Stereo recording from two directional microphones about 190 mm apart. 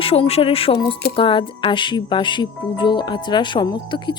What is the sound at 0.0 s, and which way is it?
A woman's voice, 30° left (ahead or behind).